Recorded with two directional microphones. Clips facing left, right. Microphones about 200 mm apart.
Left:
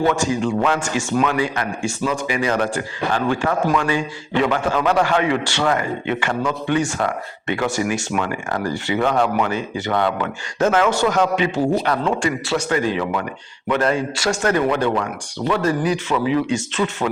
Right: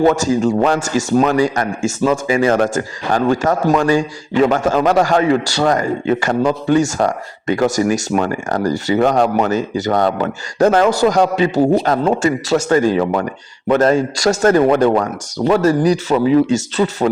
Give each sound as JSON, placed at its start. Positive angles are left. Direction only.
{"t": 0.0, "sound": "a man's voice", "side_deg": -40}